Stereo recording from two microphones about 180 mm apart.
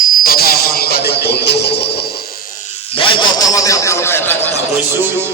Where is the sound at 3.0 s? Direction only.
25° left (ahead or behind).